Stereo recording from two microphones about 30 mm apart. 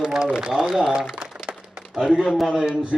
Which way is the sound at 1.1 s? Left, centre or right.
Right.